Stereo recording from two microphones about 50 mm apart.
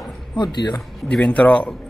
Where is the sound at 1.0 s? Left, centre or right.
Left.